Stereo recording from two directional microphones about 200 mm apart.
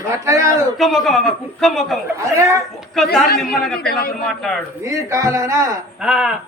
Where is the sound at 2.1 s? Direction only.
15° right (ahead or behind).